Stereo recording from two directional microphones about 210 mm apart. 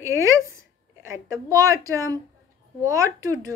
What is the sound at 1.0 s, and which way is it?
A woman's voice, 15° right (ahead or behind).